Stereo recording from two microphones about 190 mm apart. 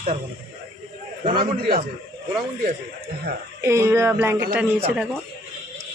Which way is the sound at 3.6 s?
15° right (ahead or behind).